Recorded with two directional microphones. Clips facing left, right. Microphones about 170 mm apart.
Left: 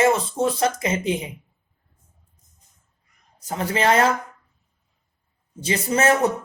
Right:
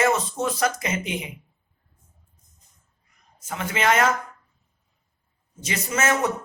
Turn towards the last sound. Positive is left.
turn(degrees=35)  # may be behind; listen again after turning